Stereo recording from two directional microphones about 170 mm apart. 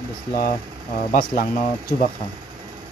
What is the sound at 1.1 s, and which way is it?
Speech, 50° left (ahead or behind).